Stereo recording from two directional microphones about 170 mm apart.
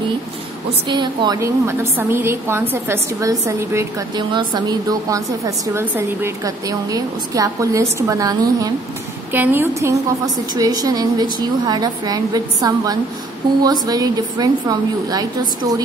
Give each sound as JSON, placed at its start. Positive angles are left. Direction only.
{"t": 0.8, "sound": "a woman's voice", "side_deg": -25}